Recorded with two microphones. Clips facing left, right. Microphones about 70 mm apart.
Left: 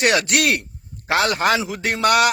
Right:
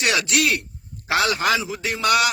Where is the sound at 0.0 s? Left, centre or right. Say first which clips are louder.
Left 3 dB; left.